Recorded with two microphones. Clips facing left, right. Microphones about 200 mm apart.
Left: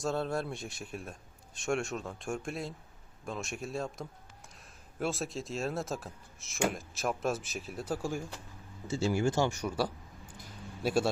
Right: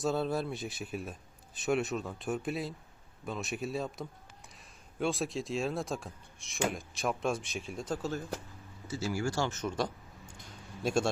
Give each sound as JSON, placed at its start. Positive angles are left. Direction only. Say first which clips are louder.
{"t": 0.0, "sound": "speech", "louder": "right 2 dB", "side_deg": 0}
{"t": 8.9, "sound": "speech", "louder": "left 4 dB", "side_deg": 25}
{"t": 10.3, "sound": "a sound", "louder": "left 3 dB", "side_deg": 5}